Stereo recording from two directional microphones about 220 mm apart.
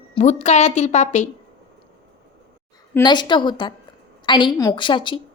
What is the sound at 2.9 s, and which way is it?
A child's voice, 20° left (ahead or behind).